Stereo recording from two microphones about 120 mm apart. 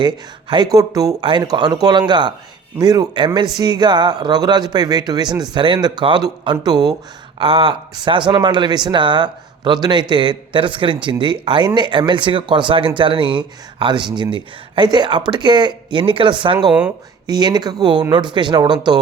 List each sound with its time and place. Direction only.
0.0 s a man's voice: 40° right (ahead or behind)
1.2 s a man's voice: 40° right (ahead or behind)
7.3 s a man's voice: 45° right (ahead or behind)